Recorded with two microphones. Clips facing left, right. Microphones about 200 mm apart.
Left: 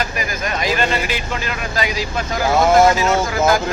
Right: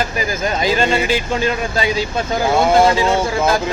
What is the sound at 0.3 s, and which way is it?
Speech, 30° right (ahead or behind).